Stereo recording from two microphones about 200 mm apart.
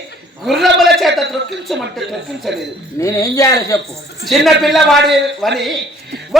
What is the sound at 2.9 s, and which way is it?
Speech, 15° left (ahead or behind).